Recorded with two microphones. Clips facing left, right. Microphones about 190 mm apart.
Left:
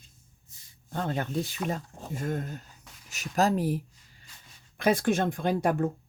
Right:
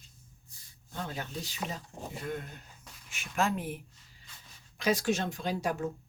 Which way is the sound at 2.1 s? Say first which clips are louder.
Left 7 dB; 45° left (ahead or behind).